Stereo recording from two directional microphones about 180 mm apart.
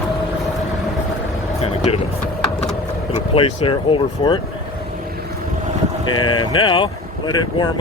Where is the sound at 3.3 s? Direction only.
30° left (ahead or behind).